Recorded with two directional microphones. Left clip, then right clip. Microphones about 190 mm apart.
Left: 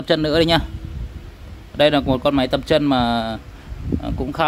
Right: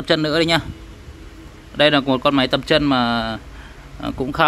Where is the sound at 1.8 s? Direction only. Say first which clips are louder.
Right 1 dB; 10° left (ahead or behind).